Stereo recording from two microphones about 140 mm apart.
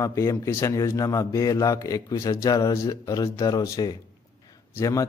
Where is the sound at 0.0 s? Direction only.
20° left (ahead or behind).